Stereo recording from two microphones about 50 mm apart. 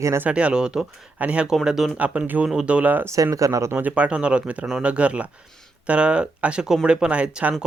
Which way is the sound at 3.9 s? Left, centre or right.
Right.